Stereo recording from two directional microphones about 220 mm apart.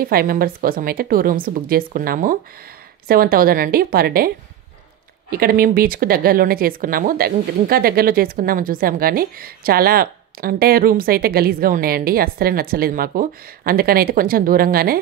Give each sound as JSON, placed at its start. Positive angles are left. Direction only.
{"t": 0.0, "sound": "a woman's voice", "side_deg": -45}
{"t": 5.3, "sound": "speech", "side_deg": -40}